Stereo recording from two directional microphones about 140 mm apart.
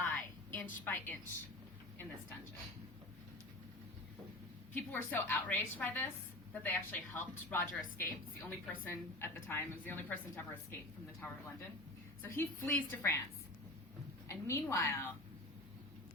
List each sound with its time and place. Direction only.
0.0 s a sound: 15° left (ahead or behind)
4.7 s a woman's voice: 15° left (ahead or behind)
12.2 s a woman's voice: 15° left (ahead or behind)
14.3 s a woman's voice: 20° left (ahead or behind)